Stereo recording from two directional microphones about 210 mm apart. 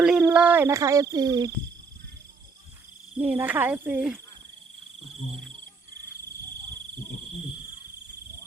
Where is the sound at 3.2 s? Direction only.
10° right (ahead or behind).